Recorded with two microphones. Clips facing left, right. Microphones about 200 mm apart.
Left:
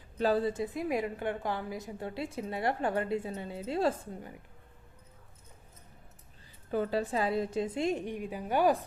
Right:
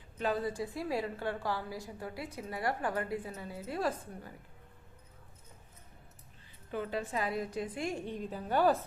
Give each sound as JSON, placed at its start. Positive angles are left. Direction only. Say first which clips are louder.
{"t": 0.2, "sound": "a woman's voice", "louder": "left 5 dB", "side_deg": 35}
{"t": 6.7, "sound": "a woman's voice", "louder": "left 6 dB", "side_deg": 35}